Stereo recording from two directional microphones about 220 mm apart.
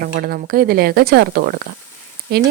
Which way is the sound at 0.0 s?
40° right (ahead or behind).